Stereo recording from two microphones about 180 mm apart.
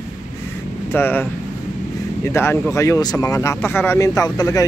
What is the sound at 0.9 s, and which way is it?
Speech, 10° left (ahead or behind).